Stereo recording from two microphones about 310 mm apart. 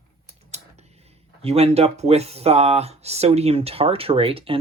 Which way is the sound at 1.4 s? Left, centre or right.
Centre.